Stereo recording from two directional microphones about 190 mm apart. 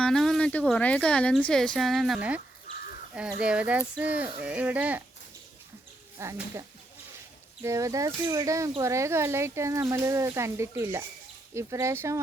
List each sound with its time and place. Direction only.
0.0 s speech: centre (ahead or behind)
6.1 s speech: 15° right (ahead or behind)